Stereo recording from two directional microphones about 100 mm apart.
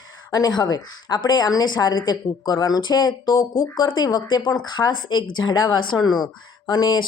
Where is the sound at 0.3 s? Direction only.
40° left (ahead or behind).